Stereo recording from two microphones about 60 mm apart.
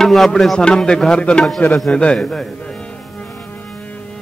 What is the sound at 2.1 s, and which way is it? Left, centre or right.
Speech, centre.